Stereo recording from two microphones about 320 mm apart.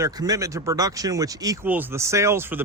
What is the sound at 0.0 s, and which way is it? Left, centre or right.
Speech, centre.